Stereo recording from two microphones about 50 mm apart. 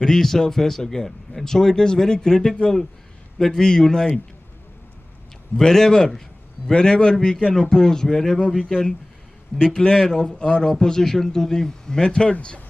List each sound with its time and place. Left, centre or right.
0.0 s a man's voice: centre
5.6 s a man's voice: centre